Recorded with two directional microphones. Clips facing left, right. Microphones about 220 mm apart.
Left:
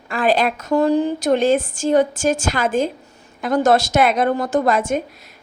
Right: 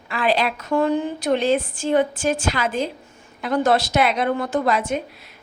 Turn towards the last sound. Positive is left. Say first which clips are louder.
# left 3 dB
turn(degrees=50)  # may be behind; listen again after turning